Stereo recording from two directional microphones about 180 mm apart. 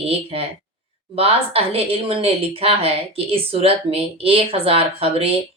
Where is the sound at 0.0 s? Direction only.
30° right (ahead or behind).